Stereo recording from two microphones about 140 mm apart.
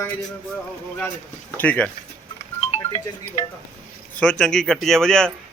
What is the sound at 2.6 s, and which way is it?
Music, 45° left (ahead or behind).